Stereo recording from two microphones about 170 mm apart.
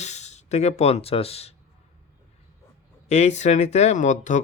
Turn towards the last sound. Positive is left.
turn(degrees=45)  # may be behind; listen again after turning